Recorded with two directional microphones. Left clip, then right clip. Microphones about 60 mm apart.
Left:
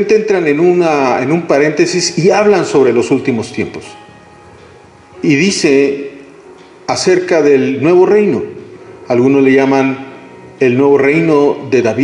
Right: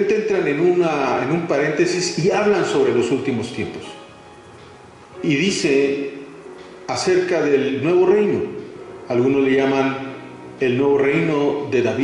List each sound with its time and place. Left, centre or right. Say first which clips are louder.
0.0 s a man's voice: left 7 dB; left
5.2 s a man's voice: left 8 dB; left
6.9 s a man's voice: left 7 dB; left